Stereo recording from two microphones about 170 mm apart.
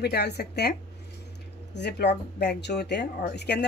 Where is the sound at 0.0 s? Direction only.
75° left (ahead or behind).